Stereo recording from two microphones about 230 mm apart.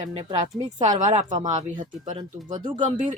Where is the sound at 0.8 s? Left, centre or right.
Right.